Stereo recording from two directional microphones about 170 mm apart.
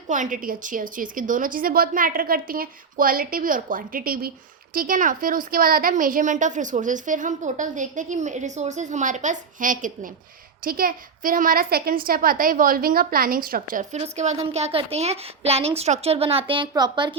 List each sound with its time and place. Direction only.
0.1 s a woman's voice: 50° right (ahead or behind)
14.0 s a woman's voice: 40° right (ahead or behind)